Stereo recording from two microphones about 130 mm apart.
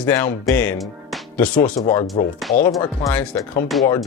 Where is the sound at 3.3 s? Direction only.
15° left (ahead or behind).